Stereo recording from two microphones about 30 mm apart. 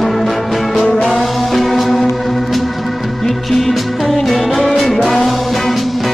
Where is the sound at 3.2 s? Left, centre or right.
Centre.